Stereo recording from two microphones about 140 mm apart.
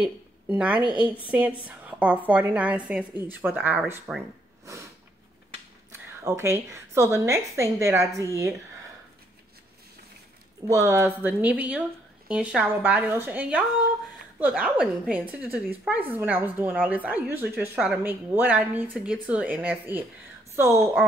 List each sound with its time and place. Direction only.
0.0 s a woman's voice: 10° right (ahead or behind)
5.9 s a woman's voice: 20° right (ahead or behind)
10.7 s a woman's voice: 20° right (ahead or behind)